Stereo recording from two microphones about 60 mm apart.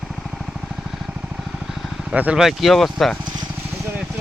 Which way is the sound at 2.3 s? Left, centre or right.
Centre.